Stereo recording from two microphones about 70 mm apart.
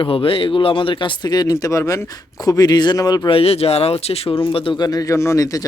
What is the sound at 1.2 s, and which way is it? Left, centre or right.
Speech, left.